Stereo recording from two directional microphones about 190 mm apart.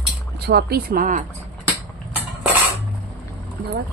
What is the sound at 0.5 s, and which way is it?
Speech, 55° right (ahead or behind).